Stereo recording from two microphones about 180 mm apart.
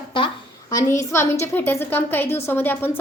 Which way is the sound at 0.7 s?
15° left (ahead or behind).